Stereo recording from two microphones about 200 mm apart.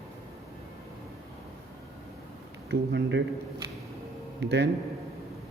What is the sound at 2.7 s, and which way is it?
Speech, 60° right (ahead or behind).